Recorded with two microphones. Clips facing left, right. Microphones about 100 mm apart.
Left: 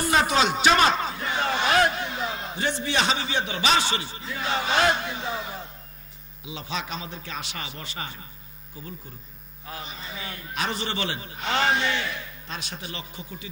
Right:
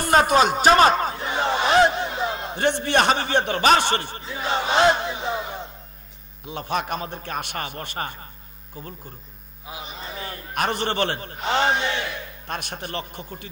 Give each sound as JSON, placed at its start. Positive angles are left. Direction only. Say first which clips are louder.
{"t": 0.0, "sound": "a man's voice", "louder": "right 5 dB", "side_deg": -45}
{"t": 1.7, "sound": "a sound", "louder": "right 5 dB", "side_deg": -25}
{"t": 2.5, "sound": "a man's voice", "louder": "right 7 dB", "side_deg": -55}
{"t": 4.3, "sound": "a man's voice", "louder": "right 3 dB", "side_deg": -30}
{"t": 6.4, "sound": "a man's voice", "louder": "right 6 dB", "side_deg": -55}
{"t": 9.9, "sound": "a man's voice", "louder": "right 3 dB", "side_deg": -35}
{"t": 10.5, "sound": "a man's voice", "louder": "right 5 dB", "side_deg": -55}
{"t": 11.4, "sound": "a man's voice", "louder": "right 2 dB", "side_deg": -30}
{"t": 12.4, "sound": "a man's voice", "louder": "right 6 dB", "side_deg": -55}